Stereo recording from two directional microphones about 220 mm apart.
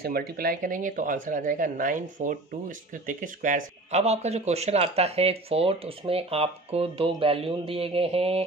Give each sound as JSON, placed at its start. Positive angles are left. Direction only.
{"t": 0.0, "sound": "speech", "side_deg": -45}